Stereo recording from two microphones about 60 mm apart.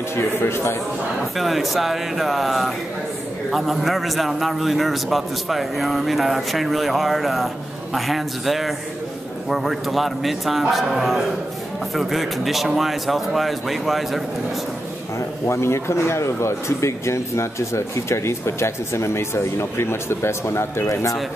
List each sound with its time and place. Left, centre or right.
0.4 s speech: left
1.3 s a man's voice: centre
15.1 s speech: left